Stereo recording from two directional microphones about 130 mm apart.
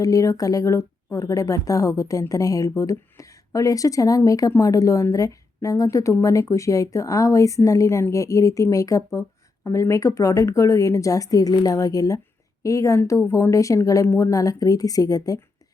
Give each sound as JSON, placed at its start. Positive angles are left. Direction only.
{"t": 0.0, "sound": "a woman's voice", "side_deg": 25}